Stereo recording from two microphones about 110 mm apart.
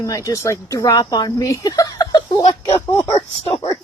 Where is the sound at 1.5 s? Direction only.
30° left (ahead or behind).